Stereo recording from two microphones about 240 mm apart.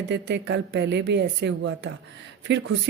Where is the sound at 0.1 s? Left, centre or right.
Right.